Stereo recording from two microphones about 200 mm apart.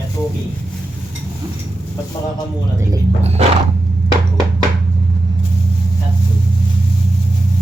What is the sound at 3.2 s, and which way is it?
Dog, 30° right (ahead or behind).